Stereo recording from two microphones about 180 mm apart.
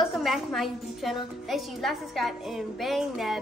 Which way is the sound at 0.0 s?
Centre (ahead or behind).